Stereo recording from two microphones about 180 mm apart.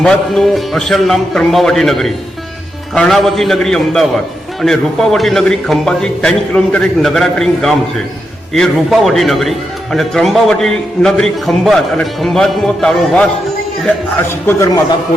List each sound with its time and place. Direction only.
0.0 s a man's voice: 5° left (ahead or behind)